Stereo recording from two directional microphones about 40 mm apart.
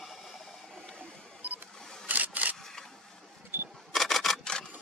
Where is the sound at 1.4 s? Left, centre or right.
Right.